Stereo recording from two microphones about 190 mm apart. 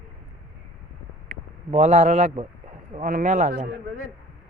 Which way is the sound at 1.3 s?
40° right (ahead or behind).